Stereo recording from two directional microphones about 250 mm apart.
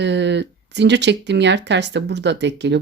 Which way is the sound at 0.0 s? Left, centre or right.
Right.